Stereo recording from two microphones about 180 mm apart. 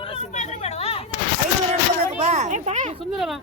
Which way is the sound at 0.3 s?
35° left (ahead or behind).